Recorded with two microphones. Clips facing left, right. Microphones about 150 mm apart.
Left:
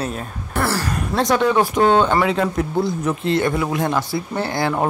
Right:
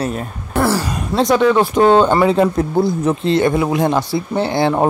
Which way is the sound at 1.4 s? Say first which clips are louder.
Right 4 dB; 10° left (ahead or behind).